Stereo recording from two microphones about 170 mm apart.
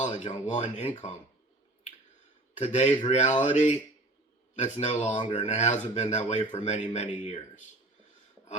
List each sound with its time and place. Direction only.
0.0 s speech: 40° left (ahead or behind)
2.6 s speech: 45° left (ahead or behind)
5.1 s speech: 30° left (ahead or behind)
5.4 s speech: 40° left (ahead or behind)